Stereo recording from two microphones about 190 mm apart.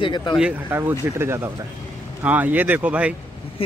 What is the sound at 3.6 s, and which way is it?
Speech, 30° left (ahead or behind).